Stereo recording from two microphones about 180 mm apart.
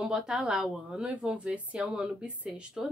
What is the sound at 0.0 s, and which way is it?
Speech, 5° right (ahead or behind).